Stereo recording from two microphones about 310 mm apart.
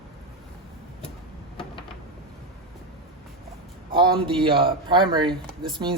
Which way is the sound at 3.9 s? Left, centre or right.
Centre.